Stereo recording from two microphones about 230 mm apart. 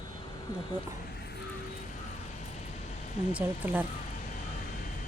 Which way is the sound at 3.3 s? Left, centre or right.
Centre.